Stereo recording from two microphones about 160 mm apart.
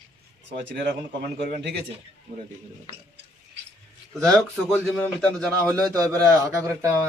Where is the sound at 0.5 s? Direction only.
90° right.